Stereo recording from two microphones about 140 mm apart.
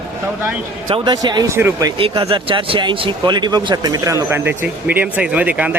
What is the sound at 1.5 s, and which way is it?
Speech, 20° right (ahead or behind).